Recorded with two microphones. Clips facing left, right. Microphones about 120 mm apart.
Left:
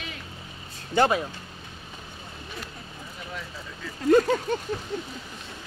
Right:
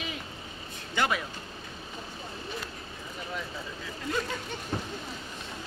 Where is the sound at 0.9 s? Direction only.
35° left (ahead or behind).